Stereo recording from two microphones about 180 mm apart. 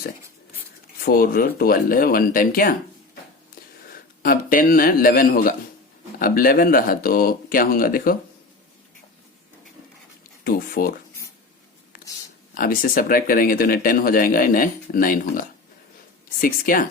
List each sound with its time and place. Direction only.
1.0 s speech: 55° left (ahead or behind)
4.2 s speech: 50° left (ahead or behind)
10.4 s speech: 50° left (ahead or behind)
12.5 s speech: 55° left (ahead or behind)